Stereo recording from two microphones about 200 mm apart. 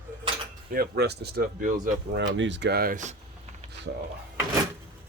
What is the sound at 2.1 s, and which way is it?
Speech, 65° right (ahead or behind).